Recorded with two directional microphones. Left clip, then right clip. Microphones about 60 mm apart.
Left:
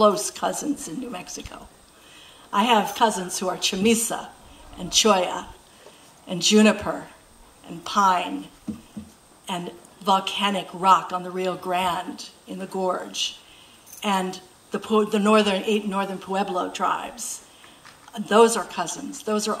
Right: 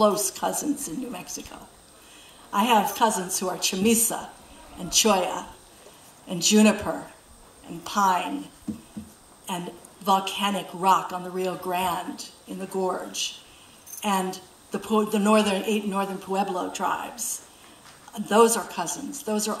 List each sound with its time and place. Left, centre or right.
0.0 s speech: left
8.7 s patter: centre
9.5 s speech: left